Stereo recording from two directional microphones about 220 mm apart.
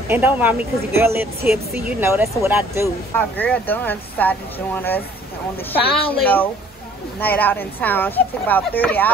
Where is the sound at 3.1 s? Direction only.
10° left (ahead or behind).